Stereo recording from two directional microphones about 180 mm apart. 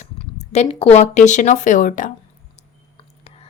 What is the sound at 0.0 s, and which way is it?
Speech, 40° left (ahead or behind).